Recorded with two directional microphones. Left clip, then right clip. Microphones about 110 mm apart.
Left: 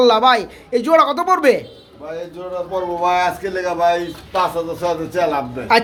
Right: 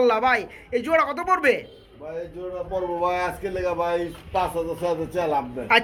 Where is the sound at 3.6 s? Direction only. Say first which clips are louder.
Left 8 dB; 45° right (ahead or behind).